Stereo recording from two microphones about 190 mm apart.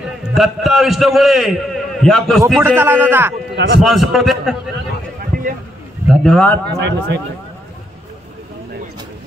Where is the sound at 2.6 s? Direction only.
10° right (ahead or behind).